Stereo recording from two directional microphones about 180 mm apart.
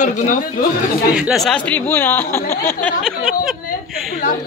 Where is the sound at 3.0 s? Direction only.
Centre (ahead or behind).